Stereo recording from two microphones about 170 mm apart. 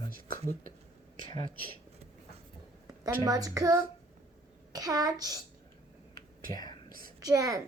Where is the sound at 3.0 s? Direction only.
20° right (ahead or behind).